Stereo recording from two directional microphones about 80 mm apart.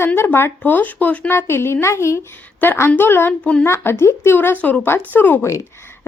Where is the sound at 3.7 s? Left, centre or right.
Left.